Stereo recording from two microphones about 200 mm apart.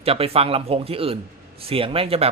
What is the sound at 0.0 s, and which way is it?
Speech, 30° right (ahead or behind).